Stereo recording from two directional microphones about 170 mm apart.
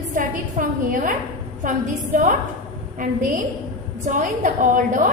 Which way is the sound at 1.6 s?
50° right (ahead or behind).